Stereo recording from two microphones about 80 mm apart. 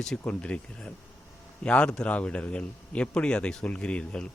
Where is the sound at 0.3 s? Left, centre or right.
Centre.